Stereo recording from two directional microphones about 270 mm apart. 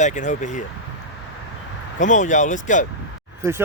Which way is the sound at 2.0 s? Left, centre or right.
Left.